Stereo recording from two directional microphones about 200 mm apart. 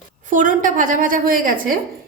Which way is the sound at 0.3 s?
40° right (ahead or behind).